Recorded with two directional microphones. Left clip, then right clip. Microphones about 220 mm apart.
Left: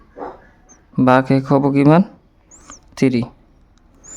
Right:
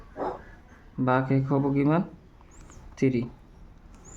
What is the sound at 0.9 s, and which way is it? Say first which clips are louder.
Speech: left 11 dB; 50° left (ahead or behind).